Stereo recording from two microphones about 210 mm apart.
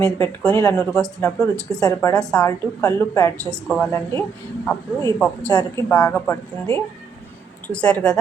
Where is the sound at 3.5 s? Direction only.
5° left (ahead or behind).